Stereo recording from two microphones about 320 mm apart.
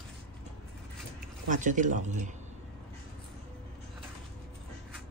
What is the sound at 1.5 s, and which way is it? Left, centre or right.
Speech, right.